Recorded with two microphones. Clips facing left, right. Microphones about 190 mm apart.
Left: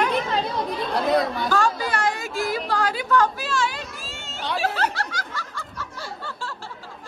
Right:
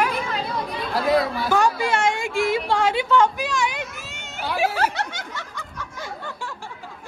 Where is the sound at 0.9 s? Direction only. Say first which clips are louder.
Right 2 dB; centre (ahead or behind).